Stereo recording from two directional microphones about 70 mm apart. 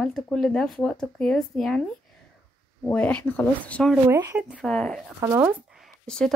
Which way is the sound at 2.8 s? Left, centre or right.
Left.